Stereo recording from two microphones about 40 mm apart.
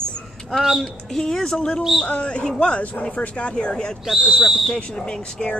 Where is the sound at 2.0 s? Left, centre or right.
Left.